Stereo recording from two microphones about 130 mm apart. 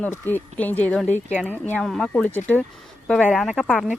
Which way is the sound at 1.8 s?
Centre (ahead or behind).